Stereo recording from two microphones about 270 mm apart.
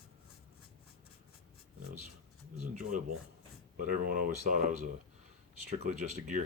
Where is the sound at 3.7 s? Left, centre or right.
Right.